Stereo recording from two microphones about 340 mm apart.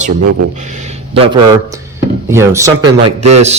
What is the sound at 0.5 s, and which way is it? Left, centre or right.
A man's voice, right.